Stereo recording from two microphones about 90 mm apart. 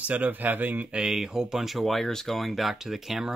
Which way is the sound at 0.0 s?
15° right (ahead or behind).